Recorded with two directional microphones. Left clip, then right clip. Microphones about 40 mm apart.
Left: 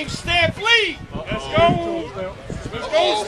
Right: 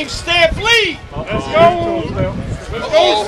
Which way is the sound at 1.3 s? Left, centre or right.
Left.